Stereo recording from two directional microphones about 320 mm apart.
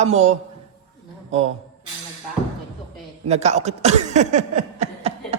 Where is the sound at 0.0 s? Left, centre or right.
Right.